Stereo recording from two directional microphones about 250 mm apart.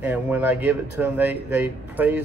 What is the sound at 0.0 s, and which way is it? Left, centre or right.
Speech, centre.